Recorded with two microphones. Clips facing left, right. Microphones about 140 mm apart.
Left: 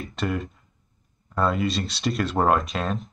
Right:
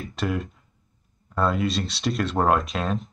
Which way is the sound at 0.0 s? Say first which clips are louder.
Even; centre (ahead or behind).